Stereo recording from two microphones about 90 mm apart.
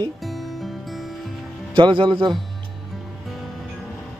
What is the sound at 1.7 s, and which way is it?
Speech, 65° right (ahead or behind).